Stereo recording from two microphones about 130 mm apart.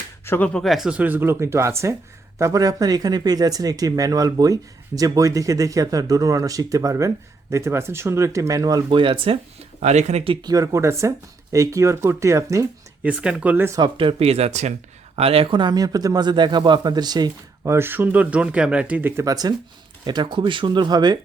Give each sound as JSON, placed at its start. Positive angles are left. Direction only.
{"t": 0.3, "sound": "speech", "side_deg": 10}
{"t": 9.8, "sound": "speech", "side_deg": -60}
{"t": 10.4, "sound": "speech", "side_deg": -25}
{"t": 13.0, "sound": "speech", "side_deg": -10}
{"t": 13.7, "sound": "speech", "side_deg": -35}
{"t": 15.1, "sound": "speech", "side_deg": -45}
{"t": 19.2, "sound": "speech", "side_deg": -30}